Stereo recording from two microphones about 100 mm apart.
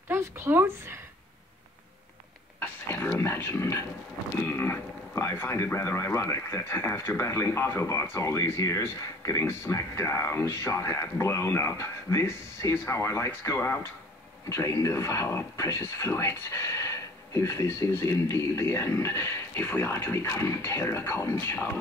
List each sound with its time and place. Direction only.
0.1 s speech: 25° right (ahead or behind)
2.6 s speech: 25° left (ahead or behind)